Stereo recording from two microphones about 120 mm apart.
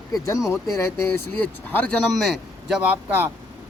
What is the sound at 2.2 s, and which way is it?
Speech, centre (ahead or behind).